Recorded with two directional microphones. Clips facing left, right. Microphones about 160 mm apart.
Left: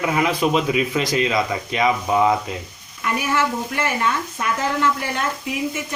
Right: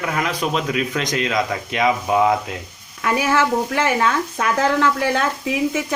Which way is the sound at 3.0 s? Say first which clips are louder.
Right 3 dB; 90° right.